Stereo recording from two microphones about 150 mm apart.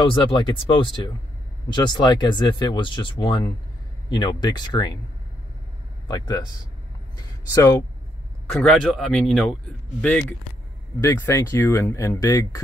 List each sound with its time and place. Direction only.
0.0 s speech: 35° left (ahead or behind)
6.0 s speech: 25° left (ahead or behind)
8.5 s speech: 5° left (ahead or behind)
11.0 s speech: 20° left (ahead or behind)